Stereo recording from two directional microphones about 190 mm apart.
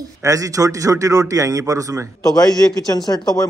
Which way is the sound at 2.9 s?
20° left (ahead or behind).